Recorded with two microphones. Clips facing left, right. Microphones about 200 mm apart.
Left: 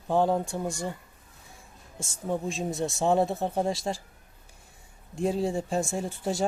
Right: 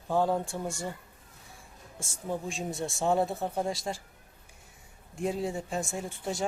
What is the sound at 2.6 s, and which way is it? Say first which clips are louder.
Speech: left 4 dB; 20° left (ahead or behind).